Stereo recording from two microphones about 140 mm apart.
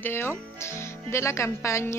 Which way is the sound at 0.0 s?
15° left (ahead or behind).